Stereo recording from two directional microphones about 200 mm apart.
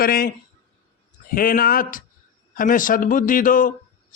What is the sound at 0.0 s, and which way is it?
A man's voice, 45° left (ahead or behind).